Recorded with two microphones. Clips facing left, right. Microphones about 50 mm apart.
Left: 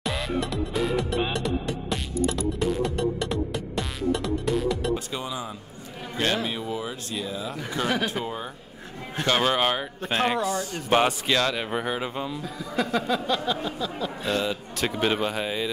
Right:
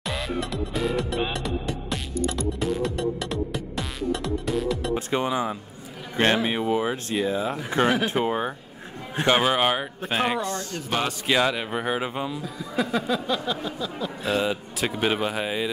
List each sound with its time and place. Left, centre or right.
0.0 s music: centre
4.9 s speech: right
9.1 s speech: centre
10.4 s speech: centre
10.9 s speech: left
11.2 s speech: centre
11.9 s speech: centre
12.3 s speech: centre